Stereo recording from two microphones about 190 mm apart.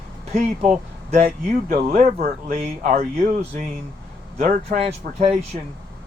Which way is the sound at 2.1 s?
50° right (ahead or behind).